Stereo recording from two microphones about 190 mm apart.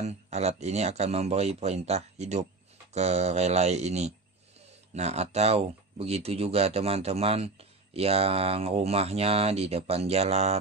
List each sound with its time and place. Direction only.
0.0 s speech: 35° right (ahead or behind)